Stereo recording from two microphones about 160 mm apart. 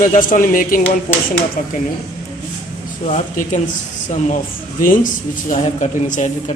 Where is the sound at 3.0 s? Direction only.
50° left (ahead or behind).